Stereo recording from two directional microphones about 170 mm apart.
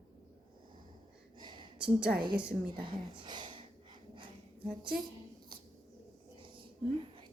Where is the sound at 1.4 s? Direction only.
25° right (ahead or behind).